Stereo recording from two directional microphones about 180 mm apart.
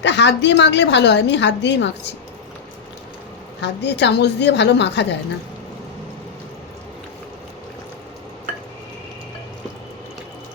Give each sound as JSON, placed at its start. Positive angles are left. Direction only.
{"t": 0.0, "sound": "a woman's voice", "side_deg": 75}
{"t": 3.6, "sound": "a woman's voice", "side_deg": 70}